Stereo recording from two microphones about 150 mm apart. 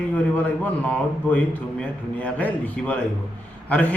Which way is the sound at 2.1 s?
10° left (ahead or behind).